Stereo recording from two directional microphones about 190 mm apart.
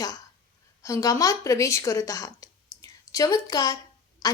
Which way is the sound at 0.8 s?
15° left (ahead or behind).